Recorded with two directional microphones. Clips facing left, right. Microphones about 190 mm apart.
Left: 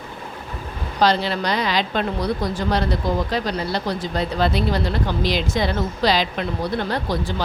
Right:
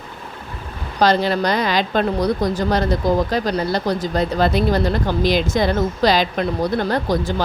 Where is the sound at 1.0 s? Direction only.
45° right (ahead or behind).